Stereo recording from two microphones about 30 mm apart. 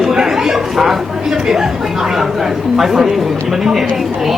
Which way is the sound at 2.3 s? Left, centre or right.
Centre.